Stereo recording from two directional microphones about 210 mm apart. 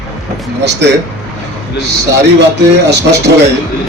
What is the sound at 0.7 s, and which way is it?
Speech, 55° right (ahead or behind).